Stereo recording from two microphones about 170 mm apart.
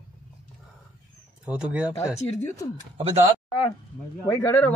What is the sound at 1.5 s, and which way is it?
Speech, 5° right (ahead or behind).